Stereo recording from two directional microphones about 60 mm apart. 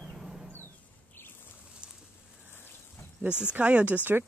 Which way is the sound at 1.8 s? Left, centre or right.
Centre.